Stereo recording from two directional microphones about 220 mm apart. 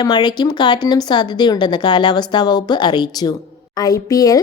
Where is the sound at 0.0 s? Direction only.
20° left (ahead or behind).